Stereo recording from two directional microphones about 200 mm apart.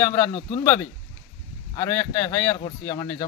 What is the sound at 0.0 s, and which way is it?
Speech, 15° left (ahead or behind).